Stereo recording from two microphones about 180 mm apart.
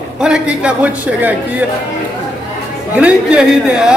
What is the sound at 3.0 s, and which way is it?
Speech, 5° right (ahead or behind).